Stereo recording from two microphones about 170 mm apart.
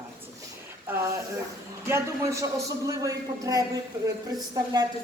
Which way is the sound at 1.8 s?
15° right (ahead or behind).